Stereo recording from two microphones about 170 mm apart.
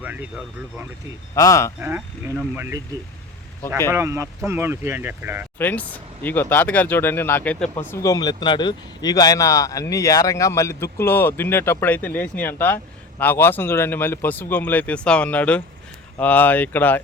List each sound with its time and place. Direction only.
0.0 s speech: 10° right (ahead or behind)
1.4 s speech: 20° left (ahead or behind)
1.8 s speech: 10° right (ahead or behind)
3.9 s speech: 15° right (ahead or behind)
5.5 s speech: 10° left (ahead or behind)